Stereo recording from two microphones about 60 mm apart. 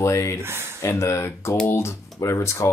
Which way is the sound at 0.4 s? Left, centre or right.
Right.